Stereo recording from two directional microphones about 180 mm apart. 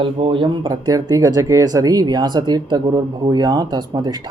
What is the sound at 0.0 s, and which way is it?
Speech, 30° right (ahead or behind).